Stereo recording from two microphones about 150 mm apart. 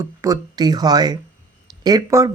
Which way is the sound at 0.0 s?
20° right (ahead or behind).